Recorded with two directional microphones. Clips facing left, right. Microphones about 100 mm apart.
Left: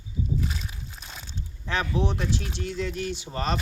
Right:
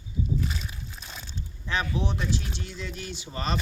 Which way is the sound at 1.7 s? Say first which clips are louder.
Left 2 dB; 65° left (ahead or behind).